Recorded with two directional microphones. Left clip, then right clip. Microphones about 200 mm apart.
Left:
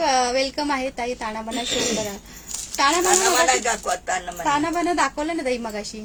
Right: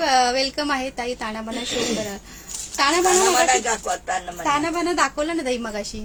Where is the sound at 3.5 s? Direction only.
50° left (ahead or behind).